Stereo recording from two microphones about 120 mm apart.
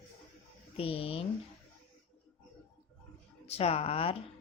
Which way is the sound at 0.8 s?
50° left (ahead or behind).